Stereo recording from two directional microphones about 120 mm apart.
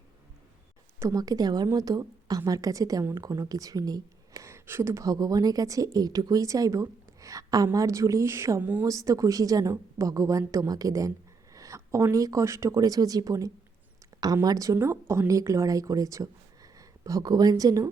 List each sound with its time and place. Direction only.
0.9 s a woman's voice: 30° right (ahead or behind)